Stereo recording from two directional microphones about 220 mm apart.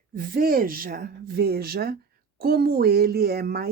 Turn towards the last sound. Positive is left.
turn(degrees=-45)  # may be behind; listen again after turning